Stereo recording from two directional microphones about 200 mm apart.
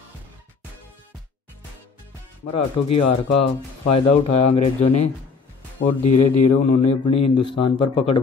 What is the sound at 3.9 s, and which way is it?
Speech, 30° left (ahead or behind).